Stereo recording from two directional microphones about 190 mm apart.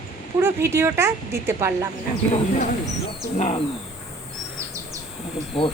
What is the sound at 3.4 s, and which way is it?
Speech, 35° left (ahead or behind).